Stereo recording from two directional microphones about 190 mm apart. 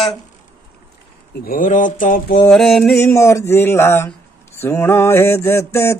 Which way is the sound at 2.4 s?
Centre (ahead or behind).